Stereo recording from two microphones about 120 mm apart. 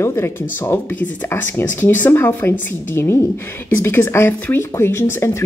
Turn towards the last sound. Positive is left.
turn(degrees=20)  # may be behind; listen again after turning